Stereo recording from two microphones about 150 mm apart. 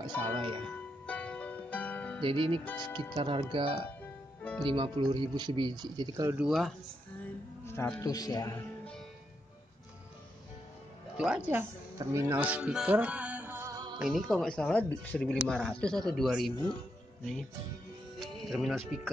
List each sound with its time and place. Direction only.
0.4 s speech: 35° right (ahead or behind)
1.0 s music: 10° left (ahead or behind)
2.2 s speech: 35° right (ahead or behind)
4.4 s music: 10° left (ahead or behind)
4.6 s speech: 35° right (ahead or behind)
6.3 s a woman's voice: centre (ahead or behind)
7.6 s a man's voice: 15° left (ahead or behind)
8.5 s music: 5° left (ahead or behind)
11.1 s a woman's voice: 5° right (ahead or behind)
12.0 s speech: 20° right (ahead or behind)
13.9 s a woman's voice: centre (ahead or behind)
18.2 s music: centre (ahead or behind)